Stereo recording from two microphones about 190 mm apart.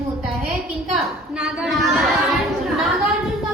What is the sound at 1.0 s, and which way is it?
A woman's voice, centre (ahead or behind).